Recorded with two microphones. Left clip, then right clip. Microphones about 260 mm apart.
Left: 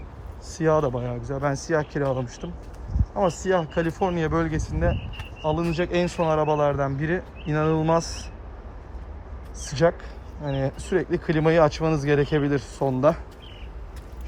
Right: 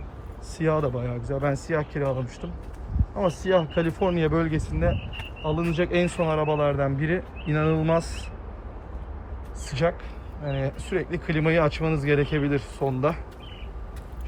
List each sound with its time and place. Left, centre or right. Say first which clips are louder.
0.5 s speech: left 3 dB; centre
3.2 s speech: even; centre
9.6 s speech: left 4 dB; centre